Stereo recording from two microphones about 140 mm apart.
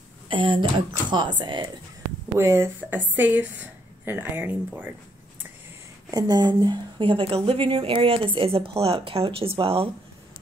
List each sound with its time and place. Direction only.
0.3 s a woman's voice: 35° right (ahead or behind)
2.3 s a woman's voice: 20° right (ahead or behind)
6.0 s a woman's voice: 30° right (ahead or behind)